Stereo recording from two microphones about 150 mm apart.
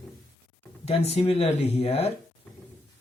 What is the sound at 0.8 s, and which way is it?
Speech, 45° left (ahead or behind).